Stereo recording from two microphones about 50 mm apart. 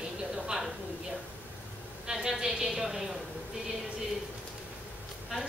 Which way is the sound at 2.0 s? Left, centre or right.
Centre.